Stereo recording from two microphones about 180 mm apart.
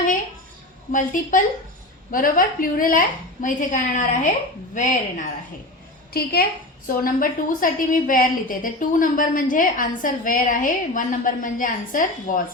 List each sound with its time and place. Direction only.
0.9 s a woman's voice: 45° left (ahead or behind)
6.8 s a woman's voice: 50° left (ahead or behind)